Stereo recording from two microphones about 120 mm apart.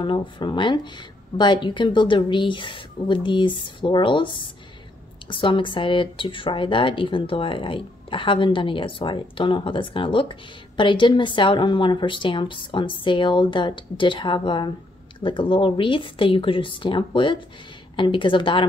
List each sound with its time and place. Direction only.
0.0 s speech: 45° left (ahead or behind)